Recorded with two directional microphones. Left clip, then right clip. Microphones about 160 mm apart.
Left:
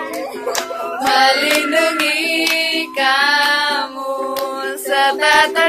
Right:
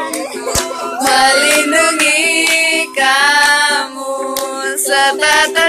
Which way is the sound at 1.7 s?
5° left (ahead or behind).